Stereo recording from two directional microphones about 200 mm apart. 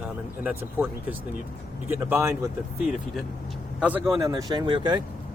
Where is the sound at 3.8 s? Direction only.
10° right (ahead or behind).